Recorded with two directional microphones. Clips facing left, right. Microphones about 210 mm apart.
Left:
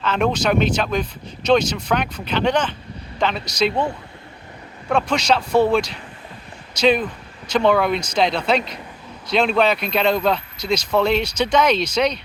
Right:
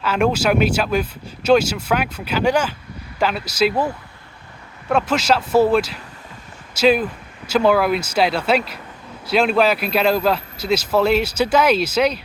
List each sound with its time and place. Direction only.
0.0 s speech: 5° right (ahead or behind)
4.9 s speech: 5° right (ahead or behind)